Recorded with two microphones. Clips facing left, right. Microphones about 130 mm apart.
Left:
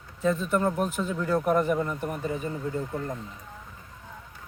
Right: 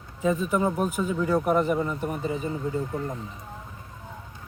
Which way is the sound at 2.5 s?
15° right (ahead or behind).